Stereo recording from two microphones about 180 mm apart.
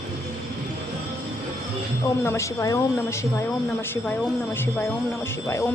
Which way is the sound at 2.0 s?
15° left (ahead or behind).